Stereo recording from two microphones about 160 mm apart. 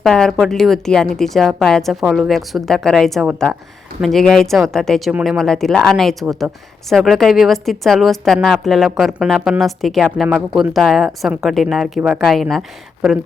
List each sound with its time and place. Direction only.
0.0 s speech: centre (ahead or behind)
5.4 s speech: centre (ahead or behind)